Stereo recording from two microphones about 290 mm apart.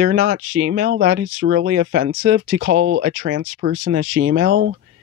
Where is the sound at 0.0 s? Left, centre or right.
Right.